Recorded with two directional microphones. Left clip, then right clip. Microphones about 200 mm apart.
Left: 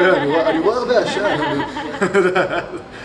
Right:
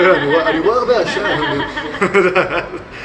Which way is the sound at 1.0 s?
55° left (ahead or behind).